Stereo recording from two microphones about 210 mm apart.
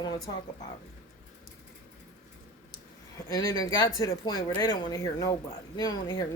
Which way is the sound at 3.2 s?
15° left (ahead or behind).